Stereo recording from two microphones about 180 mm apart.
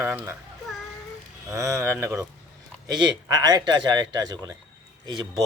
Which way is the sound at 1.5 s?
15° right (ahead or behind).